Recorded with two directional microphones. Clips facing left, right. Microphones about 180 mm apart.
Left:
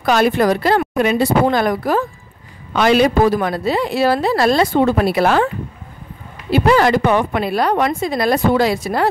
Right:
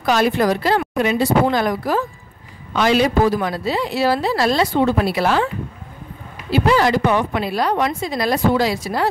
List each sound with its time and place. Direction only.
0.0 s a woman's voice: 55° left (ahead or behind)
6.5 s a woman's voice: 55° left (ahead or behind)